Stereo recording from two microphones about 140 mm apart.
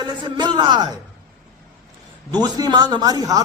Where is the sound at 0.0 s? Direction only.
30° right (ahead or behind).